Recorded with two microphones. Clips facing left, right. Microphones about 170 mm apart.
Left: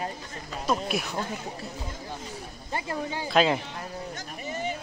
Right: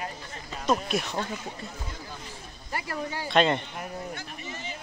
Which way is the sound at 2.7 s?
20° left (ahead or behind).